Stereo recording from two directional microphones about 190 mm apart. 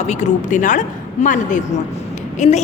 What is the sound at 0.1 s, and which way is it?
A woman's voice, 40° left (ahead or behind).